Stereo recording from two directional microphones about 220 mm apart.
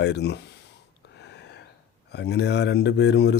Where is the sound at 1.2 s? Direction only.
50° left (ahead or behind).